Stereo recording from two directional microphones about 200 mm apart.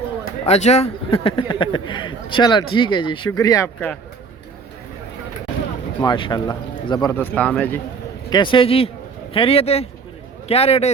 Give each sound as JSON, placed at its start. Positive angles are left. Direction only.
{"t": 0.4, "sound": "speech", "side_deg": 35}
{"t": 6.0, "sound": "speech", "side_deg": 20}
{"t": 8.3, "sound": "speech", "side_deg": 25}